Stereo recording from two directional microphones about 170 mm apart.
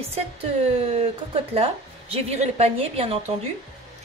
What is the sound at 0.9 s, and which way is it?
A woman's voice, 35° right (ahead or behind).